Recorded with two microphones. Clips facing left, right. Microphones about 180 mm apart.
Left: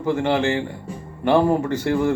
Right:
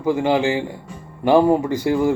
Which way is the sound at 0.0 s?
10° right (ahead or behind).